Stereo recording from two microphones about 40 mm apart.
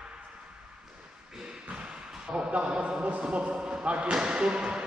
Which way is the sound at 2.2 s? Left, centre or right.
Right.